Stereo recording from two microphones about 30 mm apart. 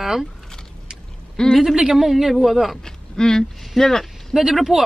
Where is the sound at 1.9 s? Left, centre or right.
Centre.